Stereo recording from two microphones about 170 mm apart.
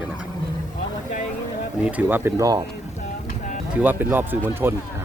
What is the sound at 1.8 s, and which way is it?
Speech, 10° right (ahead or behind).